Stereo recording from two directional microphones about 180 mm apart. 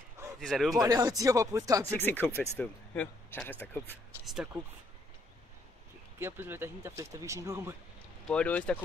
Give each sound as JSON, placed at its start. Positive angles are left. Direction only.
{"t": 0.4, "sound": "speech", "side_deg": 0}
{"t": 0.7, "sound": "speech", "side_deg": -20}
{"t": 2.0, "sound": "speech", "side_deg": 10}
{"t": 6.1, "sound": "speech", "side_deg": -10}
{"t": 8.3, "sound": "speech", "side_deg": 5}